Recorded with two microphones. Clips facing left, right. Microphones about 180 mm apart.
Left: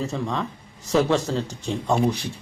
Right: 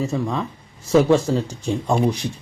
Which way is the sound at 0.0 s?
10° right (ahead or behind).